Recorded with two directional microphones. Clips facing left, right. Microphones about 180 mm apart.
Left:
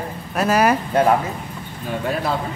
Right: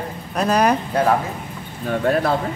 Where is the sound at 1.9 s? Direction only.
50° right (ahead or behind).